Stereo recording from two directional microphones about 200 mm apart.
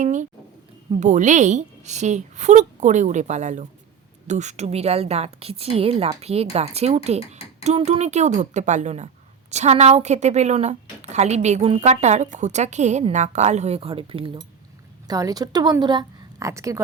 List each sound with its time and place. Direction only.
0.0 s a woman's voice: 35° right (ahead or behind); by 16.8 s 15° right (ahead or behind)